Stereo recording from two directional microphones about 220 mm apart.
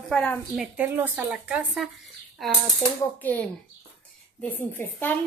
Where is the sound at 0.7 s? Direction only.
10° right (ahead or behind).